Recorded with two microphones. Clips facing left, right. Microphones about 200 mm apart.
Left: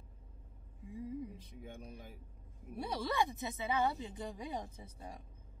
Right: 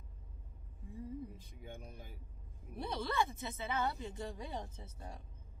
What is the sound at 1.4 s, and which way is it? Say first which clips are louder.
Speech: left 1 dB; centre (ahead or behind).